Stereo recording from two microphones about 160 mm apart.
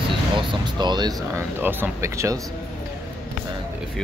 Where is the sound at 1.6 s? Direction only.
15° right (ahead or behind).